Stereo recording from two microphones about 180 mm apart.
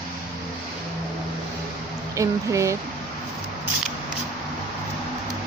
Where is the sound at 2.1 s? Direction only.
15° right (ahead or behind).